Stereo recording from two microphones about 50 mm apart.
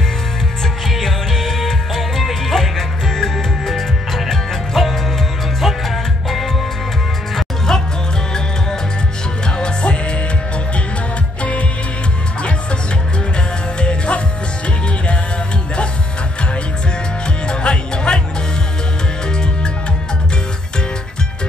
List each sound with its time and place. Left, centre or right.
0.8 s music: centre
9.6 s music: centre
13.7 s music: left
17.5 s music: centre